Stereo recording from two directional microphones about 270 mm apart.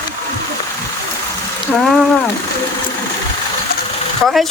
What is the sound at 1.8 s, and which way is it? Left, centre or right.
Speech, centre.